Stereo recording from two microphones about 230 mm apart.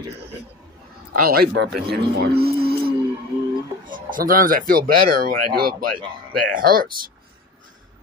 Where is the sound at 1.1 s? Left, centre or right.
Right.